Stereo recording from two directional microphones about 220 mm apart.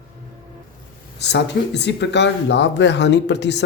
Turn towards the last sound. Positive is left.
turn(degrees=50)  # may be behind; listen again after turning